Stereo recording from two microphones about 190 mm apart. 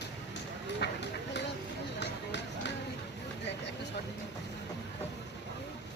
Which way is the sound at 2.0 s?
65° left (ahead or behind).